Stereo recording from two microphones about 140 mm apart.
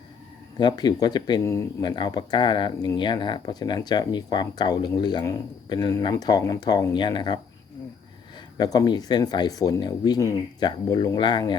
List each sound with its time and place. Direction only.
0.6 s speech: 30° left (ahead or behind)
8.5 s speech: 30° left (ahead or behind)